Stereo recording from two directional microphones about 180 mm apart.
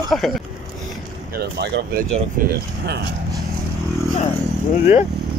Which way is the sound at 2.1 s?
55° right (ahead or behind).